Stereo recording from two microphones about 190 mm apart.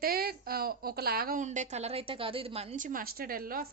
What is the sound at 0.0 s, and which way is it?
A woman's voice, 55° right (ahead or behind).